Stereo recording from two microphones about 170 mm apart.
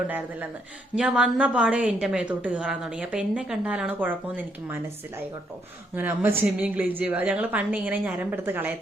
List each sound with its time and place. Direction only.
0.9 s a woman's voice: 5° right (ahead or behind)
6.0 s a woman's voice: 10° right (ahead or behind)